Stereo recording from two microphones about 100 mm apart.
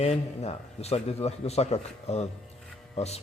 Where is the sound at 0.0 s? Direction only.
90° left.